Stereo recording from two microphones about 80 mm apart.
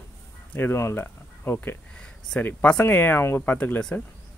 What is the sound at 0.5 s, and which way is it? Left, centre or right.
Speech, left.